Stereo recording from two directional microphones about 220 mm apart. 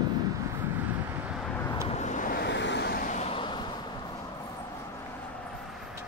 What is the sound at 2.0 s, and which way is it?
Vehicle, 35° left (ahead or behind).